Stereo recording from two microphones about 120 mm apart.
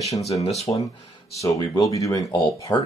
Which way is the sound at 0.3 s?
65° left (ahead or behind).